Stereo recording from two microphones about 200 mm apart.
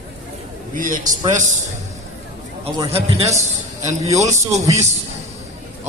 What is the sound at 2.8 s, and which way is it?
Speech, 30° right (ahead or behind).